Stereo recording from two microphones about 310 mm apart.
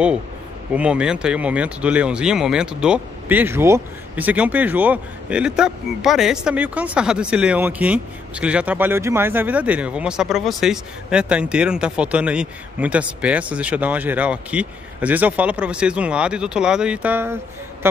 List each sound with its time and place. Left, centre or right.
0.7 s speech: centre